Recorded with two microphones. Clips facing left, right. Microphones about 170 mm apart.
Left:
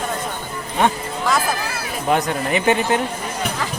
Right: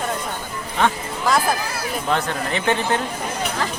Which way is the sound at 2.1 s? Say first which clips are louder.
Left 5 dB; 15° left (ahead or behind).